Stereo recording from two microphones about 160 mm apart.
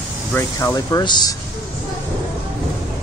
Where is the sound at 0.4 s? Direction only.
20° left (ahead or behind).